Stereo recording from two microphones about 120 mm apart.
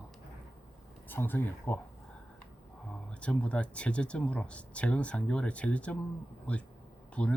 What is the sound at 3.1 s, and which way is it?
Speech, 10° left (ahead or behind).